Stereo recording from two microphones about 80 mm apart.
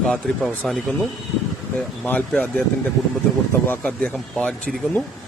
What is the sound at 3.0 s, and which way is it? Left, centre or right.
Speech, centre.